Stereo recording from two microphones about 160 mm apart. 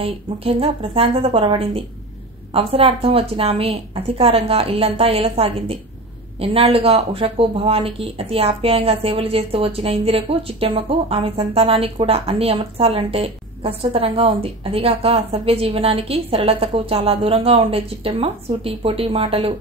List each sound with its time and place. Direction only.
0.0 s speech: 35° right (ahead or behind)